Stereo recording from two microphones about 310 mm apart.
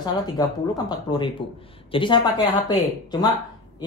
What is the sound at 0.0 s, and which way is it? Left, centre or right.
Speech, centre.